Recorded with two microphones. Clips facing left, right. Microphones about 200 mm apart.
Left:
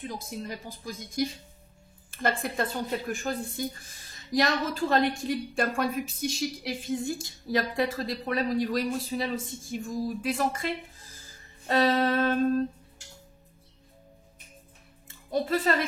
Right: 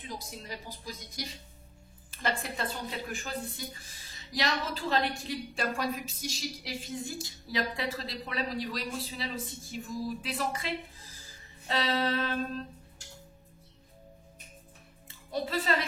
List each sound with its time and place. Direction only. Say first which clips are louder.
0.0 s speech: left 6 dB; 50° left (ahead or behind)
15.0 s speech: left 6 dB; 50° left (ahead or behind)